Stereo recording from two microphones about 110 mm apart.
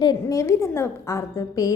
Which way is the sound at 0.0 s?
35° left (ahead or behind).